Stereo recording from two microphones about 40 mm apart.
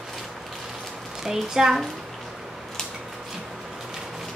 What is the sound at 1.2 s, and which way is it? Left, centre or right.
Speech, centre.